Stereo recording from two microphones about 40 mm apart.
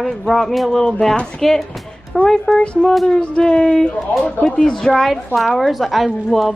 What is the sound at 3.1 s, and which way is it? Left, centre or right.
Speech, left.